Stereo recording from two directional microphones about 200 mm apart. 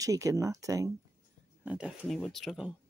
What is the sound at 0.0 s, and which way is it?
Speech, 15° right (ahead or behind).